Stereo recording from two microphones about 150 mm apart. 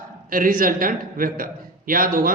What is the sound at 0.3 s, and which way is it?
A man's voice, 70° right (ahead or behind).